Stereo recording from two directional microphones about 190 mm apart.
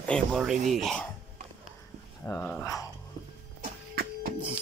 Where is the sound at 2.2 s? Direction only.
10° left (ahead or behind).